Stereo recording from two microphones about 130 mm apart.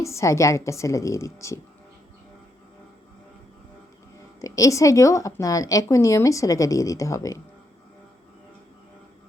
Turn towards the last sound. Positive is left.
turn(degrees=25)  # may be behind; listen again after turning